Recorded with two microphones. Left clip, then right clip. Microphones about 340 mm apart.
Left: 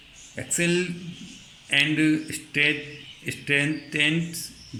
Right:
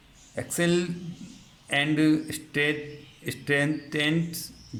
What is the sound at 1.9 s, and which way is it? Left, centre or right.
Speech, right.